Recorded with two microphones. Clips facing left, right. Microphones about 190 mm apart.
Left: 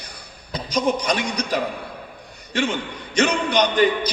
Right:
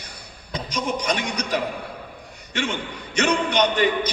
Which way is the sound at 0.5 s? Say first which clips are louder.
Left 5 dB; 35° left (ahead or behind).